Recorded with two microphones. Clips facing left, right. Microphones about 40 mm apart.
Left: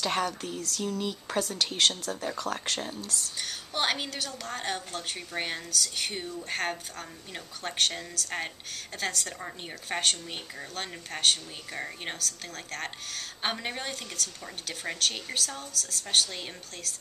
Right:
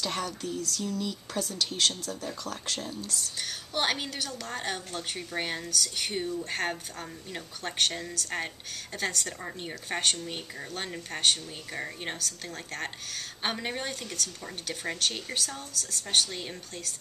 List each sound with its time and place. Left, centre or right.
0.0 s speech: left
3.3 s a woman's voice: centre